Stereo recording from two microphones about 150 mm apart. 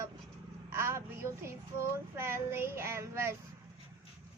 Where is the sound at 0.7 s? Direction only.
15° right (ahead or behind).